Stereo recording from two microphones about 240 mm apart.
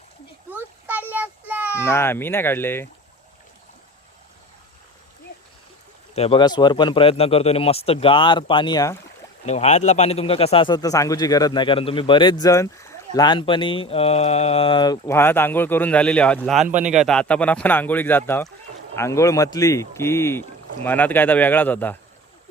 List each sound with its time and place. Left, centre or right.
1.1 s a child's voice: centre
1.7 s speech: centre
6.1 s a man's voice: left
9.5 s a man's voice: left; by 16.6 s centre
16.6 s speech: right
16.9 s speech: centre